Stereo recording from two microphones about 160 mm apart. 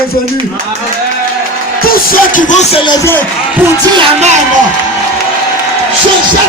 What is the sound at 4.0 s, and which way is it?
Speech, 45° right (ahead or behind).